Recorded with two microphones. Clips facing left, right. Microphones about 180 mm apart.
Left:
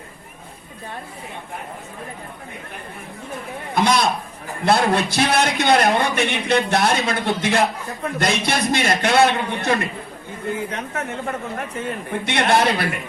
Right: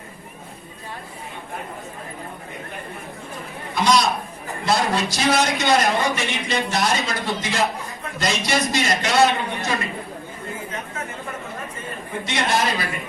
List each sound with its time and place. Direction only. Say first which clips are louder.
3.8 s a man's voice: left 1 dB; 55° left (ahead or behind)
10.7 s a man's voice: left 4 dB; 70° left (ahead or behind)